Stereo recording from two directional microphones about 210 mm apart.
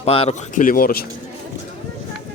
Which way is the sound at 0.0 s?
30° left (ahead or behind).